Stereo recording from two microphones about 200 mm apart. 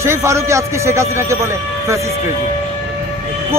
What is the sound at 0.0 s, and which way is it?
Speech, 15° right (ahead or behind).